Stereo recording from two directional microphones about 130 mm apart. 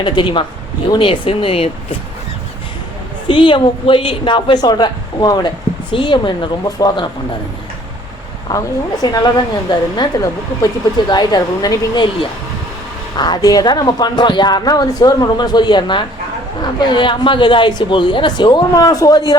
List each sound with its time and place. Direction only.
0.0 s a woman's voice: 40° left (ahead or behind)
3.2 s a woman's voice: 40° left (ahead or behind)
8.5 s a woman's voice: 30° left (ahead or behind)
13.1 s a woman's voice: 35° left (ahead or behind)